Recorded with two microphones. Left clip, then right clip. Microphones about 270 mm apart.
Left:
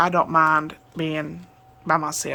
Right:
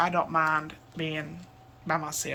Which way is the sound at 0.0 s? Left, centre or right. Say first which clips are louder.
Left 7 dB; left.